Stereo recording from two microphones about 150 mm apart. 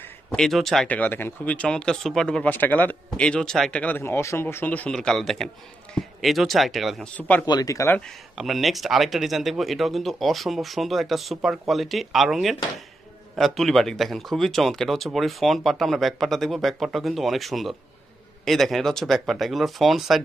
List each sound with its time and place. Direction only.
0.0 s speech: 5° left (ahead or behind)
7.2 s speech: 10° left (ahead or behind)
7.4 s speech: 25° left (ahead or behind)
8.4 s speech: centre (ahead or behind)